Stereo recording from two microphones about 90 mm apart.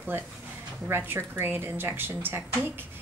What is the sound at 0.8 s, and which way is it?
A woman's voice, 25° right (ahead or behind).